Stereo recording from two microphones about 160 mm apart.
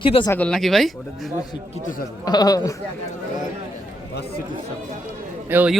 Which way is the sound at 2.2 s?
25° left (ahead or behind).